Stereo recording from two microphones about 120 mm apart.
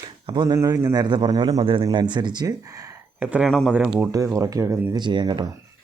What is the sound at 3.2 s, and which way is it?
Speech, 10° right (ahead or behind).